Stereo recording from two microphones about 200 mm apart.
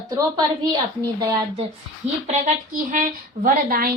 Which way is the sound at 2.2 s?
40° right (ahead or behind).